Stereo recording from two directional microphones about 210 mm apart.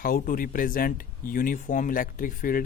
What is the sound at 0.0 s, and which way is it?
Speech, 40° left (ahead or behind).